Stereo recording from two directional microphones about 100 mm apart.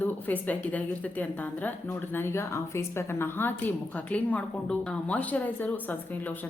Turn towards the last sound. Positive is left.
turn(degrees=15)  # may be behind; listen again after turning